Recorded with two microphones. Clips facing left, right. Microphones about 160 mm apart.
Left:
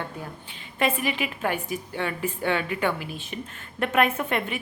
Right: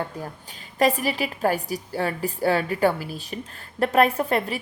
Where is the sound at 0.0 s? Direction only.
40° right (ahead or behind).